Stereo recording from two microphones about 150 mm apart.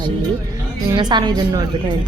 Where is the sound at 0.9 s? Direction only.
30° right (ahead or behind).